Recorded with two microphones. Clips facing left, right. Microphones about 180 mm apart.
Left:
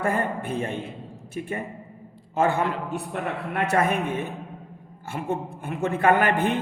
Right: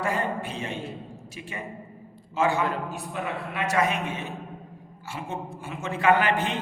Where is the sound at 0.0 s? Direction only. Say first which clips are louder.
Left 2 dB; 55° left (ahead or behind).